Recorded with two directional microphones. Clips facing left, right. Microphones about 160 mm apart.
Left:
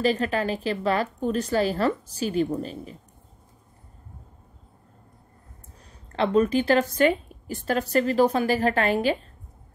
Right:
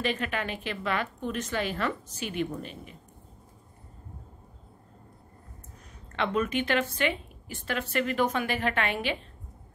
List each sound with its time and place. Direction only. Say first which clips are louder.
0.0 s a woman's voice: left 7 dB; 35° left (ahead or behind)
6.1 s a woman's voice: left 7 dB; 35° left (ahead or behind)